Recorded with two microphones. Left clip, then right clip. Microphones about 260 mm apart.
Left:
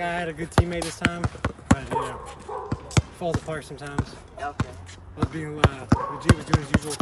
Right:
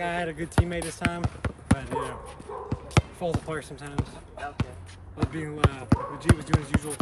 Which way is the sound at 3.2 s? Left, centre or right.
Centre.